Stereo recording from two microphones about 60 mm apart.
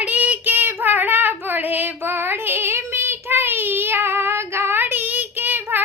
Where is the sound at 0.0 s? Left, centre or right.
Right.